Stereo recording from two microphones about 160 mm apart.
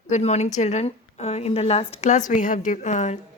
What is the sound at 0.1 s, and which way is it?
A woman's voice, 45° left (ahead or behind).